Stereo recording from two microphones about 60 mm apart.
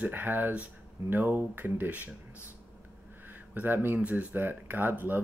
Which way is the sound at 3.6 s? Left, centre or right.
Right.